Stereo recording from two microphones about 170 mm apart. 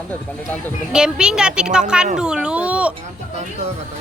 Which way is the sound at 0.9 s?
5° right (ahead or behind).